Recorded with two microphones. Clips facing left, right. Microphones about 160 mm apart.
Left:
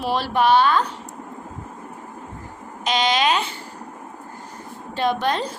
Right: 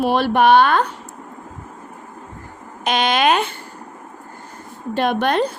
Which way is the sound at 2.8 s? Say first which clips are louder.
Right 3 dB; 55° right (ahead or behind).